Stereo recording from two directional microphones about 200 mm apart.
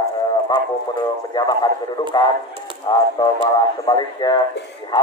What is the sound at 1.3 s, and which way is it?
Speech, 20° left (ahead or behind).